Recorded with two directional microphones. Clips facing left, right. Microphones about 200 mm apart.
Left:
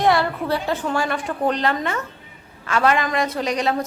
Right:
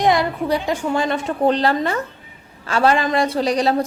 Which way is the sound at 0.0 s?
15° right (ahead or behind).